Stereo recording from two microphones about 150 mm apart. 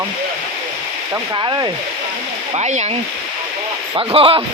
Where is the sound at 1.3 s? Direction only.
25° right (ahead or behind).